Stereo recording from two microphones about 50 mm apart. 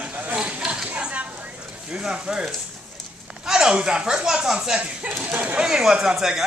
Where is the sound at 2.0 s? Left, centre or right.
Centre.